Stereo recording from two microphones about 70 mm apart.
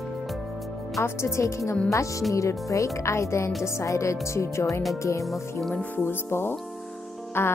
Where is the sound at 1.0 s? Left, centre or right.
Left.